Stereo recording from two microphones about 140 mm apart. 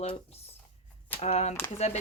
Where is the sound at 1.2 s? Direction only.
50° left (ahead or behind).